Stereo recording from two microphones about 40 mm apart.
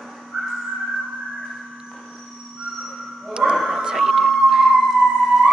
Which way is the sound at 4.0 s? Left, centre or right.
Centre.